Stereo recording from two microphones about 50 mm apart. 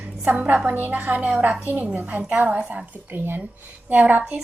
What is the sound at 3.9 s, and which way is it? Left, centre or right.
Speech, right.